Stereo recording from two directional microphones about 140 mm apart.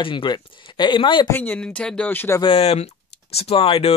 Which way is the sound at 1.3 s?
15° left (ahead or behind).